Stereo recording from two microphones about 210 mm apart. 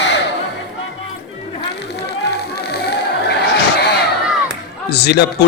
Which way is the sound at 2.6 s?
50° left (ahead or behind).